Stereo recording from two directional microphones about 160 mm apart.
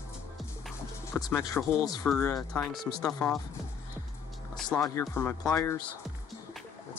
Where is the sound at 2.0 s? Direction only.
5° left (ahead or behind).